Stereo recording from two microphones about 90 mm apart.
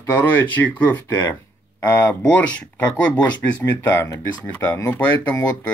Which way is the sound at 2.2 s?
15° left (ahead or behind).